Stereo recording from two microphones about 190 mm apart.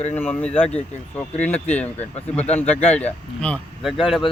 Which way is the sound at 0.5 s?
35° left (ahead or behind).